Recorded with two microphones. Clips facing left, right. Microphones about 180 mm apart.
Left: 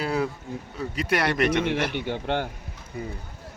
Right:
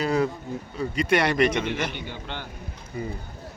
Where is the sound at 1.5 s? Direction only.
60° left (ahead or behind).